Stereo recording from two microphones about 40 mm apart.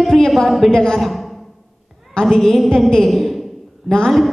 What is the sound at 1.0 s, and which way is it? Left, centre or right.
Speech, centre.